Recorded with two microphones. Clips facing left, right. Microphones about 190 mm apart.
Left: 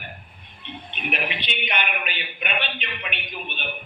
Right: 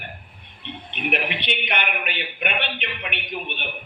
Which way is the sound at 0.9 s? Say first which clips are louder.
Right 3 dB; 60° right (ahead or behind).